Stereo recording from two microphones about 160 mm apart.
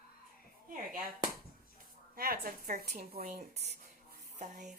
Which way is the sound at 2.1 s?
70° right (ahead or behind).